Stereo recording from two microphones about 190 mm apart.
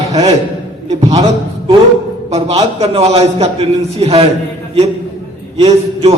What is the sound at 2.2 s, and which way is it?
A man's voice, 35° right (ahead or behind).